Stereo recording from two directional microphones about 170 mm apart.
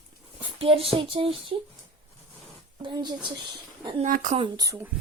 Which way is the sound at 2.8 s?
25° right (ahead or behind).